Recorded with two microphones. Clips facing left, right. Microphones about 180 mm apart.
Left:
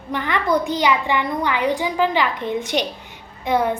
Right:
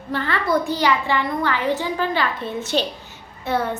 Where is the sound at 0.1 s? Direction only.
15° left (ahead or behind).